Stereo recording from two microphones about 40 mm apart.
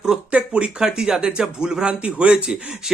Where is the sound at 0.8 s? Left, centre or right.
Centre.